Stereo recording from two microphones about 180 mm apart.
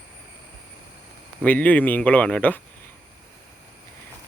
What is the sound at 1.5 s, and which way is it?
Speech, 10° left (ahead or behind).